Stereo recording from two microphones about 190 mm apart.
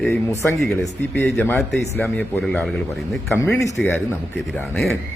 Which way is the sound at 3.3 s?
10° left (ahead or behind).